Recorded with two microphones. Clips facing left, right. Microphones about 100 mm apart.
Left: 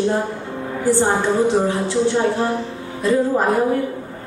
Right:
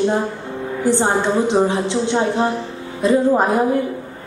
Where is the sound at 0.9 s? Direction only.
20° right (ahead or behind).